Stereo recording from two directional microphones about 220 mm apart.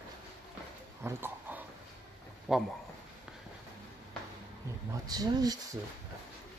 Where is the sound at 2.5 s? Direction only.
5° right (ahead or behind).